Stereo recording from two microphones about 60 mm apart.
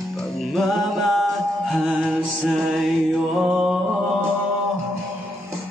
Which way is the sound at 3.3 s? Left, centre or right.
Centre.